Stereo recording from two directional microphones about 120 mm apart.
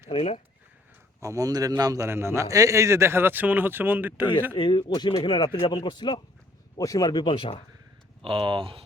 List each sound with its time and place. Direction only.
0.1 s speech: 55° left (ahead or behind)
1.2 s a man's voice: 25° right (ahead or behind)
4.5 s speech: 45° left (ahead or behind)
6.7 s speech: 30° left (ahead or behind); by 7.6 s 45° left (ahead or behind)
8.2 s speech: 45° right (ahead or behind)